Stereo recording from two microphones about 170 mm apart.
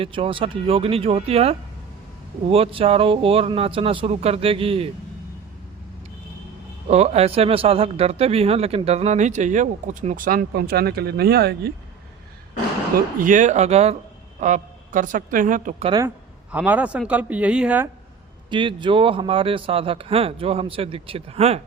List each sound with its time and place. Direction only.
0.0 s speech: 30° right (ahead or behind)
6.8 s speech: 40° right (ahead or behind); by 11.7 s 70° right (ahead or behind)
13.1 s a woman's voice: 50° right (ahead or behind)
15.8 s speech: 25° right (ahead or behind)
16.0 s speech: 10° right (ahead or behind)
18.5 s speech: 30° right (ahead or behind)